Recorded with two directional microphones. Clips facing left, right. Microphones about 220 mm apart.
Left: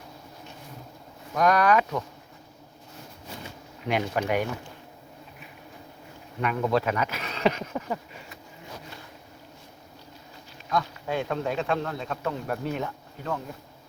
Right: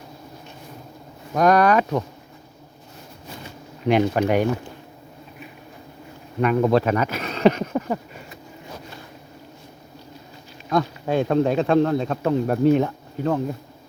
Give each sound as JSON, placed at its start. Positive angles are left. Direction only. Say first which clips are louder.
{"t": 1.3, "sound": "speech", "louder": "right 5 dB", "side_deg": -40}
{"t": 3.8, "sound": "speech", "louder": "right 8 dB", "side_deg": -35}
{"t": 6.4, "sound": "speech", "louder": "right 7 dB", "side_deg": -40}
{"t": 10.7, "sound": "speech", "louder": "right 7 dB", "side_deg": -40}